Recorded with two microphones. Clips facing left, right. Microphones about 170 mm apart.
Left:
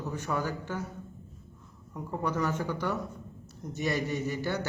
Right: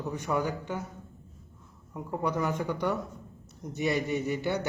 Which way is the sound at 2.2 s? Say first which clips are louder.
Right 1 dB; 15° right (ahead or behind).